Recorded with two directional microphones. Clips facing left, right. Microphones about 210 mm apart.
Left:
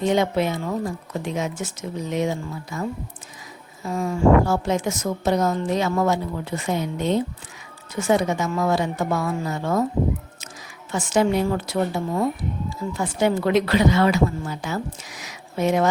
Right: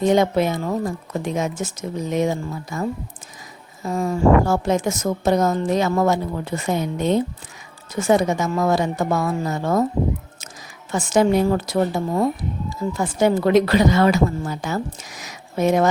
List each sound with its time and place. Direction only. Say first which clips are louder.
0.0 s a woman's voice: right 3 dB; 45° right (ahead or behind)
3.8 s a woman's voice: right 1 dB; 40° right (ahead or behind)
10.9 s a woman's voice: right 3 dB; 45° right (ahead or behind)